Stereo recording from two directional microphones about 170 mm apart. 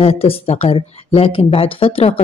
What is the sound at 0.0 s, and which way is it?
A woman's voice, 35° left (ahead or behind).